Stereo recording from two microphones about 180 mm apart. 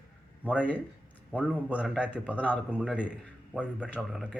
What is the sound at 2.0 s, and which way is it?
Speech, 5° right (ahead or behind).